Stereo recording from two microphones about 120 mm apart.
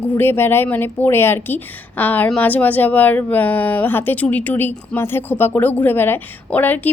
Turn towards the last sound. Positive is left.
turn(degrees=15)  # may be behind; listen again after turning